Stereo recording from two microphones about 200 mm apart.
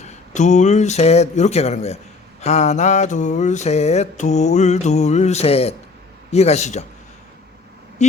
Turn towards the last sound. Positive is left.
turn(degrees=35)  # may be behind; listen again after turning